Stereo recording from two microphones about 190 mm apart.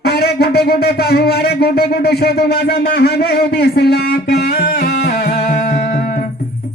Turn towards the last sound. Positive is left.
turn(degrees=50)  # may be behind; listen again after turning